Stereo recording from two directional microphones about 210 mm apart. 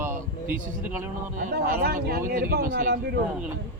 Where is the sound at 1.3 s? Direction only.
45° right (ahead or behind).